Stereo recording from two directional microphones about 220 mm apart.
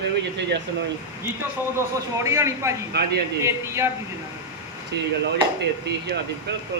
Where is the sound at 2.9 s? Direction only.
45° right (ahead or behind).